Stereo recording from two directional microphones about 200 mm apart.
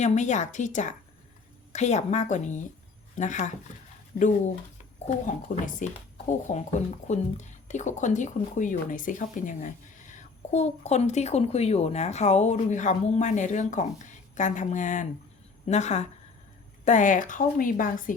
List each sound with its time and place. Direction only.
0.0 s speech: 35° left (ahead or behind)